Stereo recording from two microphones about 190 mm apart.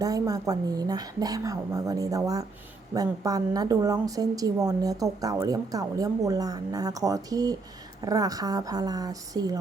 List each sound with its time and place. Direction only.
0.0 s a woman's voice: 20° right (ahead or behind)